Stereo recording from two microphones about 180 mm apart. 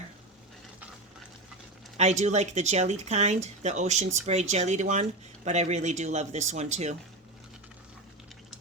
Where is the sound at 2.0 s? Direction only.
40° right (ahead or behind).